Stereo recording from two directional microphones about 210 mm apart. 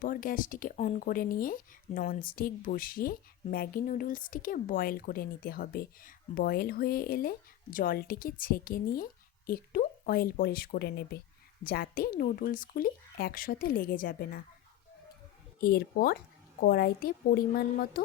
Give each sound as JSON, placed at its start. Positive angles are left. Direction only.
{"t": 0.0, "sound": "speech", "side_deg": 40}
{"t": 15.6, "sound": "speech", "side_deg": 45}